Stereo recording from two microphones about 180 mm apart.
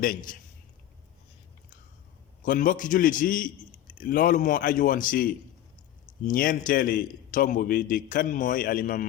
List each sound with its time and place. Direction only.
0.0 s a man's voice: 50° left (ahead or behind)
2.4 s a man's voice: 50° left (ahead or behind)